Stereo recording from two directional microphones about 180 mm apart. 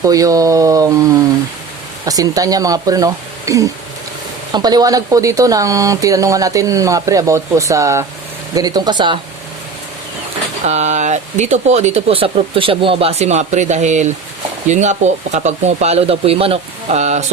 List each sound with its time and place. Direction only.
0.0 s speech: 20° right (ahead or behind)
10.7 s speech: 40° right (ahead or behind)